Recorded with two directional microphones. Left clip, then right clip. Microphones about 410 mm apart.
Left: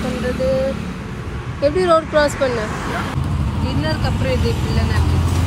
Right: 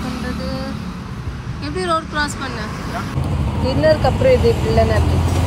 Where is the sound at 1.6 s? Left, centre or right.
Centre.